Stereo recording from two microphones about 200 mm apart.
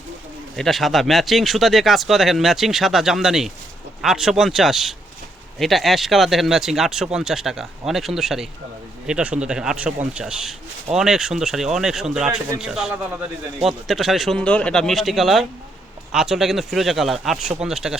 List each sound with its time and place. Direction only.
0.5 s speech: centre (ahead or behind)